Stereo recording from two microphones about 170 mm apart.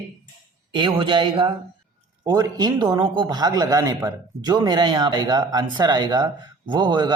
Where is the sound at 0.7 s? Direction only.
30° right (ahead or behind).